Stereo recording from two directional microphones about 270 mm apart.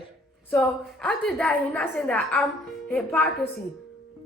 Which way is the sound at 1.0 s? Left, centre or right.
Centre.